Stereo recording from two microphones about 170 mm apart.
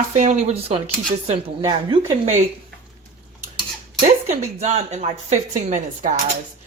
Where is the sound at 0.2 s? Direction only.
45° right (ahead or behind).